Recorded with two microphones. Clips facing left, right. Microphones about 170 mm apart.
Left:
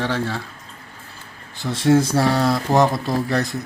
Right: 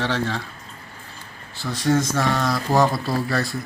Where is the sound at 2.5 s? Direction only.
20° left (ahead or behind).